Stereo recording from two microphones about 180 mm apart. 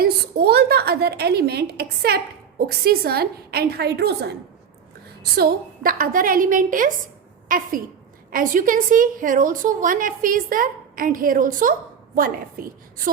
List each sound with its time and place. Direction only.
0.0 s a woman's voice: 65° right (ahead or behind)